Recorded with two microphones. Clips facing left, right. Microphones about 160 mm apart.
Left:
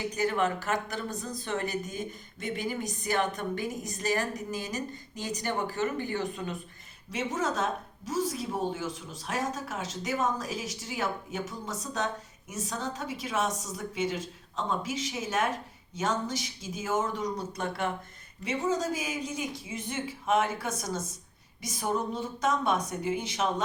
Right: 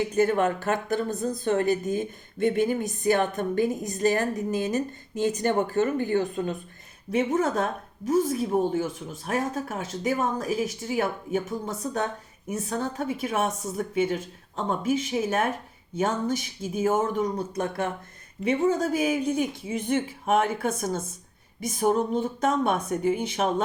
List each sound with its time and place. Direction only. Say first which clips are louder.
0.1 s a woman's voice: right 3 dB; 50° right (ahead or behind)
3.0 s a woman's voice: right 6 dB; 50° right (ahead or behind)